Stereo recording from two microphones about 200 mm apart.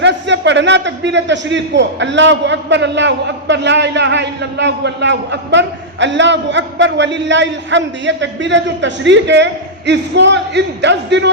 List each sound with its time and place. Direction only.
0.0 s a man's voice: 60° right (ahead or behind)